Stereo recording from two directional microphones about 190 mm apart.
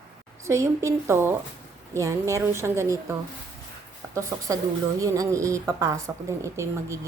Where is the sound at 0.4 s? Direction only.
15° right (ahead or behind).